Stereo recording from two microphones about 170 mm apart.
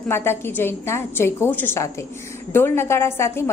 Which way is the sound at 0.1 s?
15° left (ahead or behind).